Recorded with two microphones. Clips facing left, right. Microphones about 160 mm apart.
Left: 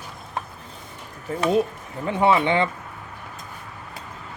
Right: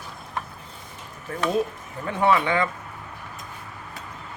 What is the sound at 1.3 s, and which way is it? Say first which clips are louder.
Speech: left 3 dB; 20° left (ahead or behind).